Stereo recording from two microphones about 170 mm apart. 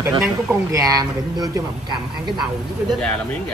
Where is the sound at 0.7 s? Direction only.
20° right (ahead or behind).